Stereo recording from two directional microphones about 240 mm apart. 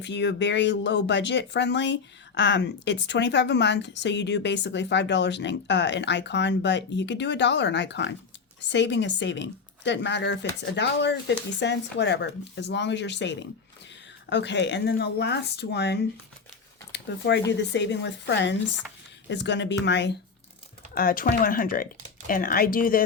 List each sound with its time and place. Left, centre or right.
0.0 s speech: left